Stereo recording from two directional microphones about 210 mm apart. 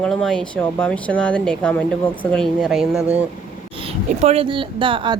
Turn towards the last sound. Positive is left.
turn(degrees=-25)  # may be behind; listen again after turning